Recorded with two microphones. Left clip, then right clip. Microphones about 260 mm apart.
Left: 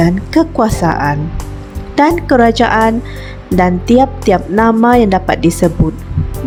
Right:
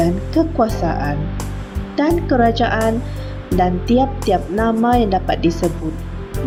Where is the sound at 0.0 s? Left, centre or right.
Left.